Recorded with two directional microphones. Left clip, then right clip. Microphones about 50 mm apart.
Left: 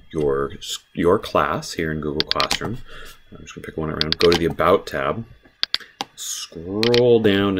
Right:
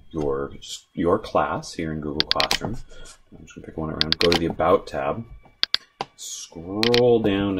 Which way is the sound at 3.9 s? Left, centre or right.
Centre.